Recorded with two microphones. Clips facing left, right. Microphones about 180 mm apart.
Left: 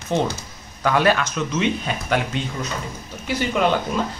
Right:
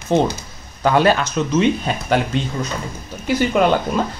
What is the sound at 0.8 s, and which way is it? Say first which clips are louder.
Speech: right 3 dB; 30° right (ahead or behind).